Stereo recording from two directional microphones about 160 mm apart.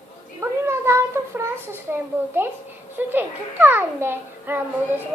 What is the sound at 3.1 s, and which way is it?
A child's voice, 10° right (ahead or behind).